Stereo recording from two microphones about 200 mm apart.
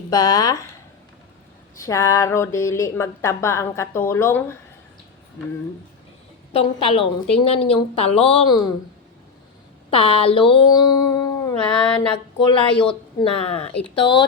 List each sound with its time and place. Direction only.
0.1 s a woman's voice: 20° left (ahead or behind)
1.8 s speech: 15° left (ahead or behind)
6.5 s a woman's voice: 30° left (ahead or behind)
9.9 s a sound: 25° left (ahead or behind)
11.9 s a woman's voice: 25° left (ahead or behind)